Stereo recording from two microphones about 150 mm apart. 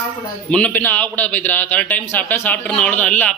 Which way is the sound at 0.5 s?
10° left (ahead or behind).